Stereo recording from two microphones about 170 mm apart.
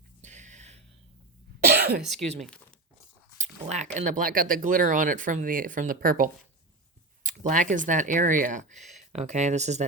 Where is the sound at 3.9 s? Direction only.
45° right (ahead or behind).